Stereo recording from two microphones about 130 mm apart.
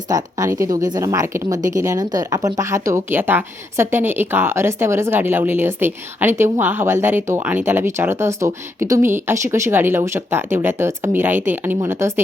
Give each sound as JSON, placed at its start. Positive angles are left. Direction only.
{"t": 0.1, "sound": "speech", "side_deg": -30}